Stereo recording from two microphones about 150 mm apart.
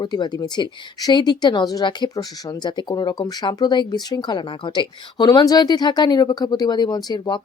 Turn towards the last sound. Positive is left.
turn(degrees=30)  # may be behind; listen again after turning